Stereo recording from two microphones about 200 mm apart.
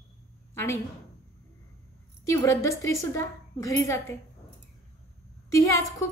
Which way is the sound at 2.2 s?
15° left (ahead or behind).